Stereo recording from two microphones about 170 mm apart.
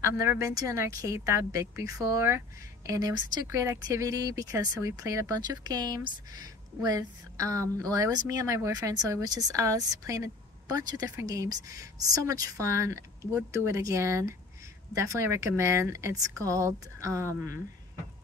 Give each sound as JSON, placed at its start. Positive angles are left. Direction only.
{"t": 0.0, "sound": "speech", "side_deg": -15}